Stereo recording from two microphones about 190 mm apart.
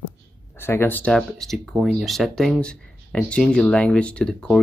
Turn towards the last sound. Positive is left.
turn(degrees=5)  # may be behind; listen again after turning